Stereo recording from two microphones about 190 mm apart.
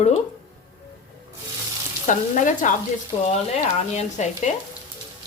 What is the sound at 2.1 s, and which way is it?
Frying, 40° left (ahead or behind).